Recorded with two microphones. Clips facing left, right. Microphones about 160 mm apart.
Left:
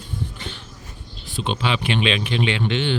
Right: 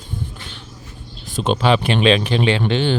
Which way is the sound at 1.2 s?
45° right (ahead or behind).